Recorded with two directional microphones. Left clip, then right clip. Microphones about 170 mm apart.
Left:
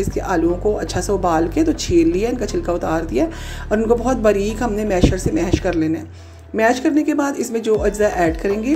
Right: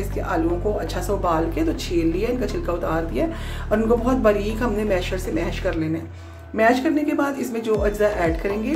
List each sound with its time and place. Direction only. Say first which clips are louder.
0.3 s speech: left 4 dB; 35° left (ahead or behind)